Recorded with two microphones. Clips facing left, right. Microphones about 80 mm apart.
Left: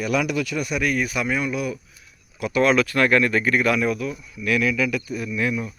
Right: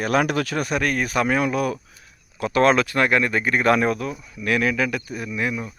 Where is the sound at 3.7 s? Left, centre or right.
Right.